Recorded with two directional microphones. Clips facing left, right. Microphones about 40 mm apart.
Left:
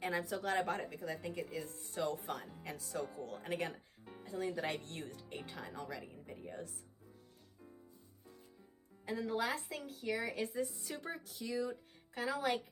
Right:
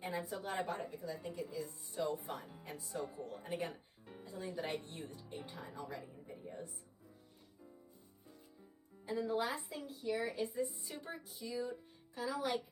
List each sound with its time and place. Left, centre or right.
0.0 s speech: left
2.6 s speech: left
4.2 s a woman's voice: left
9.0 s a woman's voice: left
12.1 s speech: left